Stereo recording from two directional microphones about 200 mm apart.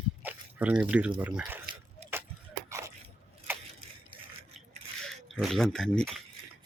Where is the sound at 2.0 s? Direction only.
35° right (ahead or behind).